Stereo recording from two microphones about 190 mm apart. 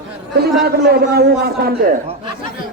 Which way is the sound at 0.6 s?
55° right (ahead or behind).